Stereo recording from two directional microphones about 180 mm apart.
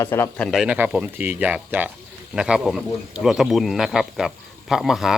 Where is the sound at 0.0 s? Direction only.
15° left (ahead or behind).